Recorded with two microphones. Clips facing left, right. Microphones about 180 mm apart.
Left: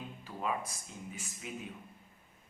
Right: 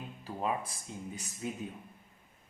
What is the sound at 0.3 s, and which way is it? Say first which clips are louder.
A man's voice: right 3 dB; 30° right (ahead or behind).